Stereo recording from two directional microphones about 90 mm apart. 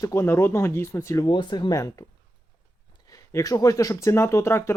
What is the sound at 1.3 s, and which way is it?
Speech, 60° left (ahead or behind).